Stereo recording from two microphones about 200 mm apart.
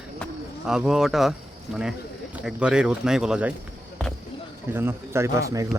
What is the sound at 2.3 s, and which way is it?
Speech, 5° right (ahead or behind).